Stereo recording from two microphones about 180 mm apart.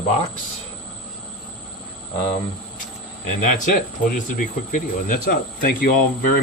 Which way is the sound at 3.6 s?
45° left (ahead or behind).